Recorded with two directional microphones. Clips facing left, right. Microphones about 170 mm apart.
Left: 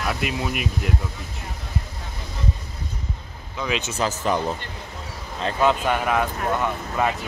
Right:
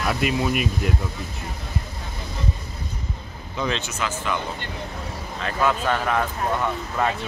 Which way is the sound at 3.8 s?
35° left (ahead or behind).